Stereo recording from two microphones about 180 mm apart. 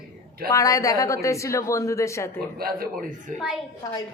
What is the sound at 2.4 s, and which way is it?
Speech, 55° right (ahead or behind).